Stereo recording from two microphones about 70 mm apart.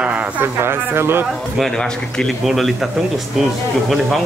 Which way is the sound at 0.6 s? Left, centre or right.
Right.